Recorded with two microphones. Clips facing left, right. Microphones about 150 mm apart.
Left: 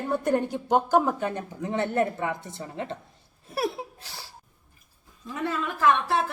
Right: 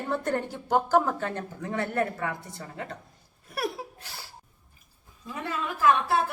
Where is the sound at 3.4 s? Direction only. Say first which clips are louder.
Left 3 dB; 25° left (ahead or behind).